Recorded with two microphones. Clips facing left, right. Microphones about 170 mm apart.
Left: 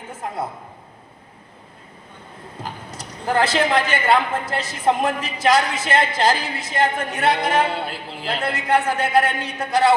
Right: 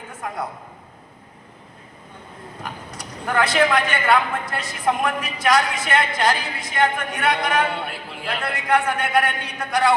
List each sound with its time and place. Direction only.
2.6 s speech: 25° left (ahead or behind)